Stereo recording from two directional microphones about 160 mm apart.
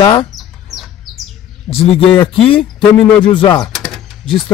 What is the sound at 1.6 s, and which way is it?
Speech, 35° left (ahead or behind).